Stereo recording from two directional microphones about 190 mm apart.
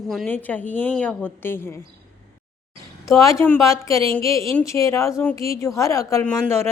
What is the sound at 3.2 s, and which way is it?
Speech, 15° left (ahead or behind).